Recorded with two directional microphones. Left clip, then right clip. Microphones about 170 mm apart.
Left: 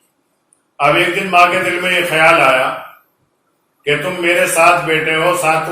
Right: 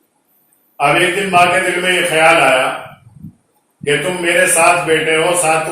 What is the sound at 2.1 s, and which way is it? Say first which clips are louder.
Speech: even; 20° right (ahead or behind).